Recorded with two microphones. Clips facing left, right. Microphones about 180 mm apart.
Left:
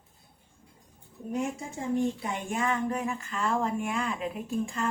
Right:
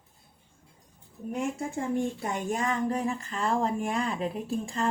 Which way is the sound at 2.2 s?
35° right (ahead or behind).